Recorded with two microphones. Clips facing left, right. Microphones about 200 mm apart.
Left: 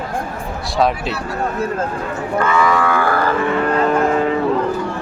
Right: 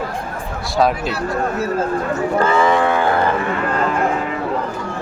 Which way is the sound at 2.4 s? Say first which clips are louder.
Even; 30° right (ahead or behind).